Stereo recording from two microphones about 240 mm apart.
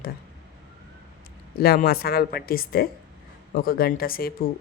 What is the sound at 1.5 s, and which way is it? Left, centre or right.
Speech, left.